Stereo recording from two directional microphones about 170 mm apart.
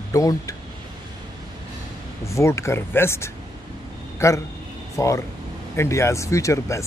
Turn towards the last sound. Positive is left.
turn(degrees=15)  # may be behind; listen again after turning